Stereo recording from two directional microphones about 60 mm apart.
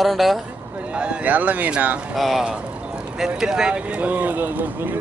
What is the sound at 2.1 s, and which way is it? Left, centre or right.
Speech, centre.